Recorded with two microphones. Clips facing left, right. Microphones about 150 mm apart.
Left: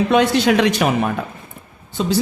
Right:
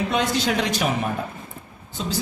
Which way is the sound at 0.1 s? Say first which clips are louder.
Left 8 dB; 65° left (ahead or behind).